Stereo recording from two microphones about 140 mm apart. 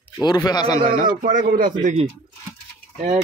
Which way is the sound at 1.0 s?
70° right (ahead or behind).